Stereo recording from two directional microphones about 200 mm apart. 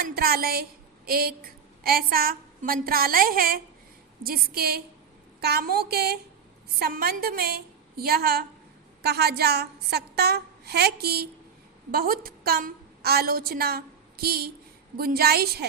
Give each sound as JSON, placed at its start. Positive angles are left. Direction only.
{"t": 0.0, "sound": "a woman's voice", "side_deg": -50}